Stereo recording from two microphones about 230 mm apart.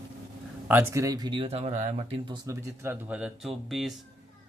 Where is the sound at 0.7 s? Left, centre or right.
Centre.